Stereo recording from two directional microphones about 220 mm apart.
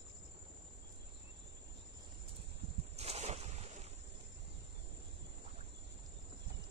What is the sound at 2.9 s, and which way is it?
Ocean, 30° right (ahead or behind).